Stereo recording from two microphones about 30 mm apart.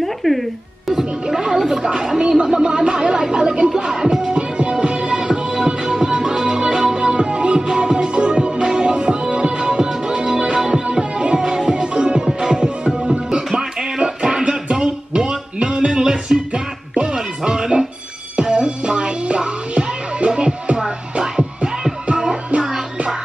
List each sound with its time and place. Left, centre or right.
0.0 s speech: centre
0.9 s speech: centre
2.6 s a sound: right
3.7 s music: right
12.2 s music: right
16.0 s music: right